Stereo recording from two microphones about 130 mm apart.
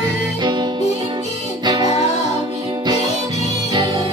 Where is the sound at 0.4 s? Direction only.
35° right (ahead or behind).